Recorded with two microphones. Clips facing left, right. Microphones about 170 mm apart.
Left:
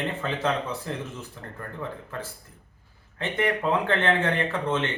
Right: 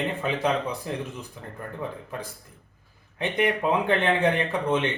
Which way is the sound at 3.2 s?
15° right (ahead or behind).